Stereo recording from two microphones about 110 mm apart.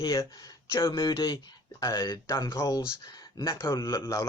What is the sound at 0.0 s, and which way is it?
Speech, 35° left (ahead or behind).